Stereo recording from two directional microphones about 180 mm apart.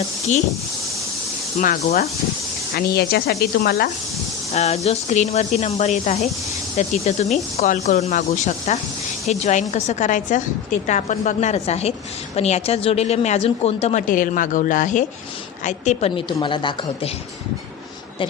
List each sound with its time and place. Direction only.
1.5 s speech: 45° left (ahead or behind); by 3.8 s 65° left (ahead or behind)
4.5 s speech: 35° left (ahead or behind)
14.1 s speech: 50° left (ahead or behind); by 17.1 s 25° left (ahead or behind)